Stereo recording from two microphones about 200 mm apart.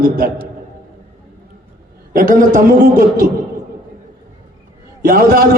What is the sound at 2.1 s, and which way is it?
A man's voice, 45° right (ahead or behind).